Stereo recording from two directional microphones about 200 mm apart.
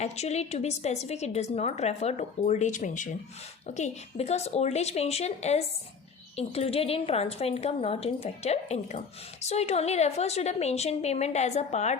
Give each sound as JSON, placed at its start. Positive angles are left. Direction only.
{"t": 0.0, "sound": "a woman's voice", "side_deg": 35}